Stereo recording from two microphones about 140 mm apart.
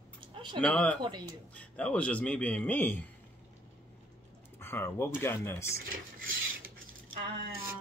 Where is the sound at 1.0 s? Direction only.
30° right (ahead or behind).